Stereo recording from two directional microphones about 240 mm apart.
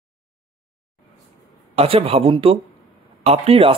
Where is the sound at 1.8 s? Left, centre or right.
Right.